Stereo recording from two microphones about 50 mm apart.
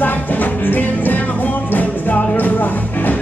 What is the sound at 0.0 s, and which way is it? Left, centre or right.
Music, left.